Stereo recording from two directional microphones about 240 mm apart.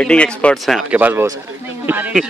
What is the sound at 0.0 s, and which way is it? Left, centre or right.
Speech, centre.